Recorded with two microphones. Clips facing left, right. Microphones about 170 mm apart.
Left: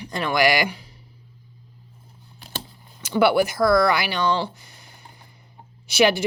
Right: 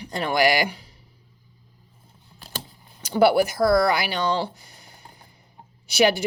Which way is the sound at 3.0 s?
35° right (ahead or behind).